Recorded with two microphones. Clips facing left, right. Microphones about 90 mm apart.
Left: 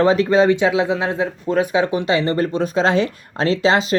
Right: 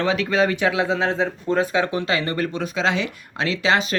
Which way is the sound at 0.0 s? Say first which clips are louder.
Left 6 dB; 35° left (ahead or behind).